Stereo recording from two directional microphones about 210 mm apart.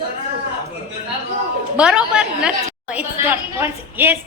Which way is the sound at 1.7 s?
5° right (ahead or behind).